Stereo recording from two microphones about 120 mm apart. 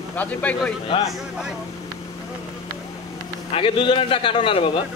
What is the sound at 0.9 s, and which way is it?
Speech, 55° left (ahead or behind).